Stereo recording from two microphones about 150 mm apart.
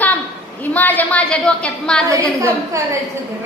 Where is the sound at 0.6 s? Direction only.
10° left (ahead or behind).